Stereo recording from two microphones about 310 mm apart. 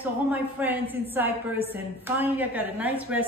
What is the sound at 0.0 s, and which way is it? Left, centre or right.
Speech, centre.